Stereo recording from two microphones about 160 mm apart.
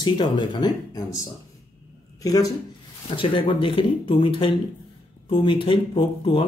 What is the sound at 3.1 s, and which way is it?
Speech, 30° left (ahead or behind).